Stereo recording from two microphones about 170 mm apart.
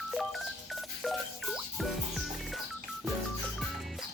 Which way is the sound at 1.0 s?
Centre (ahead or behind).